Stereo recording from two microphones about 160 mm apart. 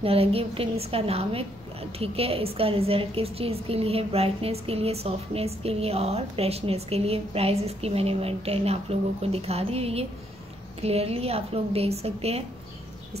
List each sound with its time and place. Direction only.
0.0 s a woman's voice: 35° right (ahead or behind)